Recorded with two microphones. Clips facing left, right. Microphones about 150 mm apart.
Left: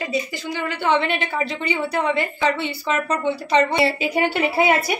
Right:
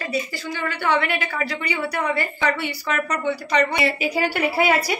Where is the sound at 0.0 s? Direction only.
20° left (ahead or behind).